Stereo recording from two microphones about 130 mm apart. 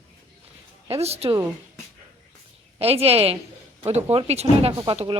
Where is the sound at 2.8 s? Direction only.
50° right (ahead or behind).